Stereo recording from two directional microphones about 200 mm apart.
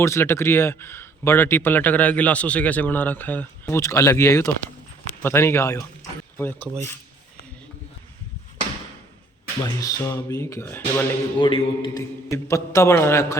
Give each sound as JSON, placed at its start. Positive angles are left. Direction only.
{"t": 0.0, "sound": "speech", "side_deg": 15}
{"t": 9.6, "sound": "speech", "side_deg": 15}
{"t": 11.3, "sound": "speech", "side_deg": 20}